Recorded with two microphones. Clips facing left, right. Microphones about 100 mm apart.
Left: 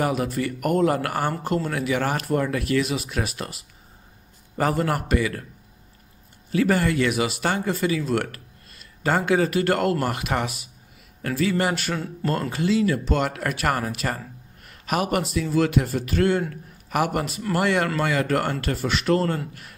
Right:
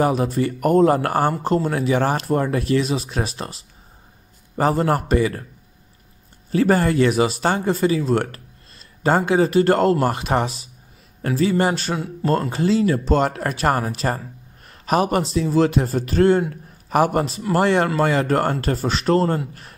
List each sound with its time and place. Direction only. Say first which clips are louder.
0.0 s speech: right 5 dB; 30° right (ahead or behind)
6.5 s speech: right 4 dB; 35° right (ahead or behind)